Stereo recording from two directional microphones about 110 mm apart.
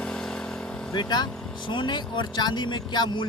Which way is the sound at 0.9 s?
40° left (ahead or behind).